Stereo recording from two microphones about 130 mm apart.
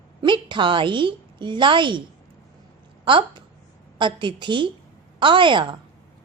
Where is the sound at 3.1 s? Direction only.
40° right (ahead or behind).